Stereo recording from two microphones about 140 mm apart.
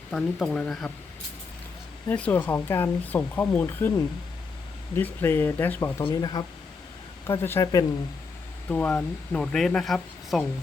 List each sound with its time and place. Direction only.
0.1 s speech: 5° left (ahead or behind)
2.0 s speech: 10° left (ahead or behind)
6.1 s speech: 30° left (ahead or behind)
7.3 s speech: 20° left (ahead or behind)
8.7 s speech: 10° left (ahead or behind)